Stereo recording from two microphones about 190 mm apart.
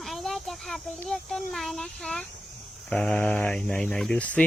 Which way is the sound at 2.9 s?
5° left (ahead or behind).